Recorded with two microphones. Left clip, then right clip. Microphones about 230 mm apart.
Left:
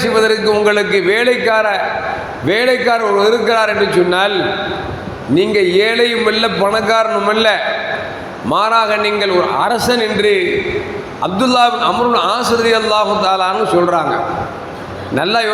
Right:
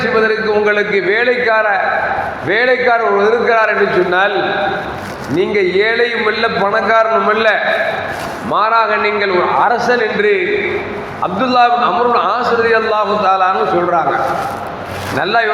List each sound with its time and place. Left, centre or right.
0.0 s a man's voice: left
5.4 s a man's voice: left
15.2 s a man's voice: left